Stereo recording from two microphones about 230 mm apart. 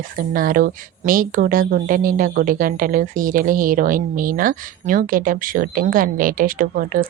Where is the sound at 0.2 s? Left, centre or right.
Right.